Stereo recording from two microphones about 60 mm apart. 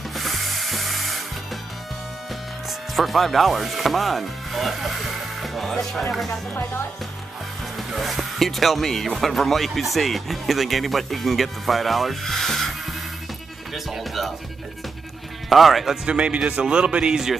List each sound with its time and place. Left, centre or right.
0.1 s music: centre
2.9 s chopping: centre
6.5 s speech: left
7.7 s speech: centre
15.5 s speech: centre
16.1 s speech: centre